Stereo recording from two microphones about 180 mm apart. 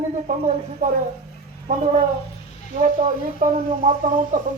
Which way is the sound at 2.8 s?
40° right (ahead or behind).